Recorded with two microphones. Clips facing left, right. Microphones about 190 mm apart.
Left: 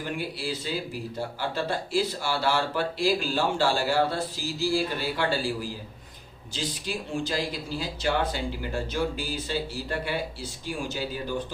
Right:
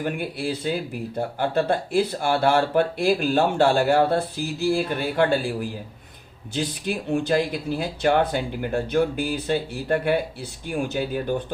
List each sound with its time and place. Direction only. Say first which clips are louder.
0.0 s speech: right 5 dB; 55° right (ahead or behind)
6.5 s speech: right 6 dB; 60° right (ahead or behind)